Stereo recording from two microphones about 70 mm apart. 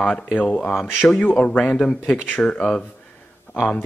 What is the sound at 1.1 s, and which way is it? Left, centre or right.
Speech, centre.